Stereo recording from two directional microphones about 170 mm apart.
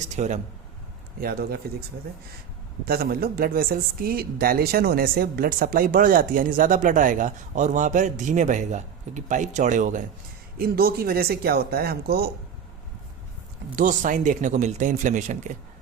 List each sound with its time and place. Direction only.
0.0 s speech: 45° right (ahead or behind)
1.2 s speech: 60° right (ahead or behind)
2.8 s speech: 65° right (ahead or behind)
10.6 s speech: 65° right (ahead or behind)
13.7 s speech: 50° right (ahead or behind)